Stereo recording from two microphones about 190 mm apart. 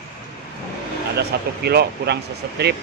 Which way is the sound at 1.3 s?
55° right (ahead or behind).